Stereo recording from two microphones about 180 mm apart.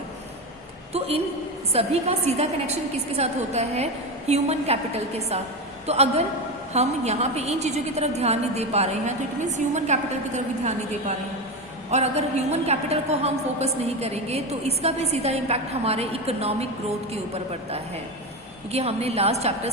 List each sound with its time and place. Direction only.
0.9 s a woman's voice: 35° right (ahead or behind)
11.9 s a woman's voice: 35° right (ahead or behind)